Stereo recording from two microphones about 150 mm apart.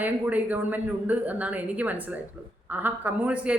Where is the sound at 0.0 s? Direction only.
10° right (ahead or behind).